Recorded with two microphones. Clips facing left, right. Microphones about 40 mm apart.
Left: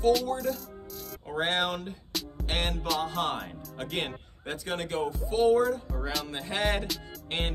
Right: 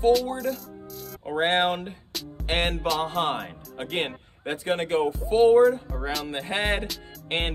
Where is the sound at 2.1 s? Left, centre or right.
Centre.